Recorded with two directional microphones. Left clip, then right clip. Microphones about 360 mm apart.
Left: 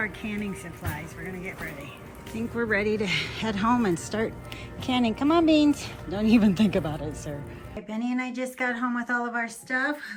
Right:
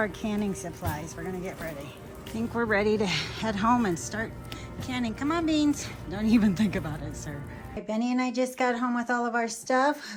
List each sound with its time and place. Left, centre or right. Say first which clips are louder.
0.0 s speech: right 1 dB; centre